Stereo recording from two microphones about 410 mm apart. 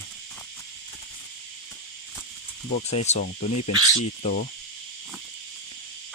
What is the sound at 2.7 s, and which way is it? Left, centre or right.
Speech, centre.